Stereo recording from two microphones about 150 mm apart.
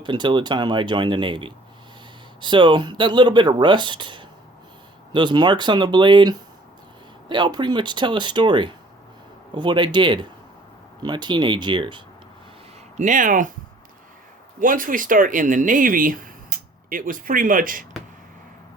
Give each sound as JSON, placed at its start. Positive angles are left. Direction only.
{"t": 0.0, "sound": "speech", "side_deg": -30}
{"t": 13.0, "sound": "speech", "side_deg": -60}
{"t": 14.6, "sound": "speech", "side_deg": -65}